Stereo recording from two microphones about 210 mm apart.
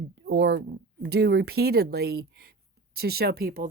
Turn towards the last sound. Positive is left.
turn(degrees=-45)  # may be behind; listen again after turning